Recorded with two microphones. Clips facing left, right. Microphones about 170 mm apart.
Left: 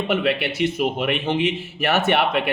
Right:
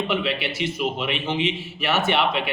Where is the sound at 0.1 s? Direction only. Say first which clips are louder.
Left 4 dB; 55° left (ahead or behind).